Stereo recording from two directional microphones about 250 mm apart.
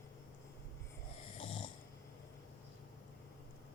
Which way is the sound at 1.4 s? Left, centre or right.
Left.